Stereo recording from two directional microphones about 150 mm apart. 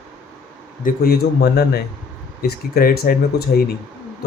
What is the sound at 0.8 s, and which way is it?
Speech, 75° left (ahead or behind).